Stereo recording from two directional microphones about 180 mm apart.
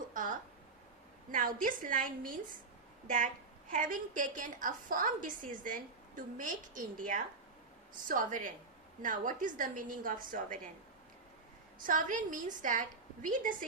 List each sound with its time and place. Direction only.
0.1 s a sound: 45° right (ahead or behind)
1.3 s a woman's voice: 50° right (ahead or behind)
3.7 s a woman's voice: 50° right (ahead or behind)
11.9 s a woman's voice: 45° right (ahead or behind)